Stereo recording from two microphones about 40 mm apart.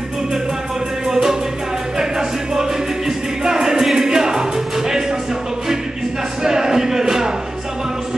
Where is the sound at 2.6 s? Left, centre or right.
Centre.